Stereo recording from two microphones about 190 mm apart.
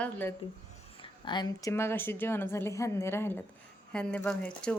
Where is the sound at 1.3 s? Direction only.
20° left (ahead or behind).